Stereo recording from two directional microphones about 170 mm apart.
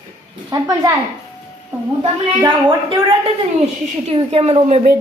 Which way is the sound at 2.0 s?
25° right (ahead or behind).